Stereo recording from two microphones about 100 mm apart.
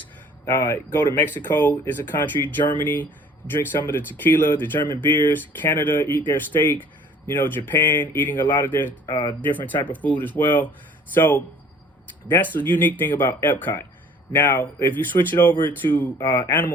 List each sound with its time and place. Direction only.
0.4 s speech: 20° left (ahead or behind)
9.0 s speech: 30° left (ahead or behind)
9.4 s speech: 20° left (ahead or behind)